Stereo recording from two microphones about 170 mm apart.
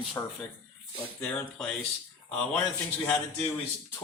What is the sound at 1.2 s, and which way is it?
Speech, 5° left (ahead or behind).